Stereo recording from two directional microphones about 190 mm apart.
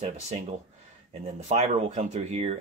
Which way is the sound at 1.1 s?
35° right (ahead or behind).